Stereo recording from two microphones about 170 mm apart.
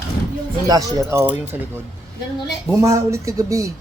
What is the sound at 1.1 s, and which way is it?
Speech, 10° right (ahead or behind).